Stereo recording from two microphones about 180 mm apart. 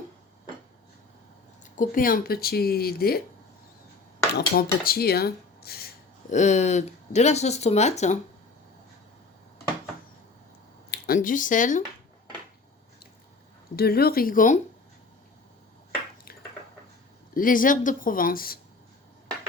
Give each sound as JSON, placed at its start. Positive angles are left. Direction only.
{"t": 1.6, "sound": "speech", "side_deg": 45}
{"t": 4.4, "sound": "speech", "side_deg": 55}
{"t": 6.3, "sound": "speech", "side_deg": 40}
{"t": 11.0, "sound": "speech", "side_deg": 50}
{"t": 13.7, "sound": "speech", "side_deg": 60}
{"t": 17.3, "sound": "speech", "side_deg": 50}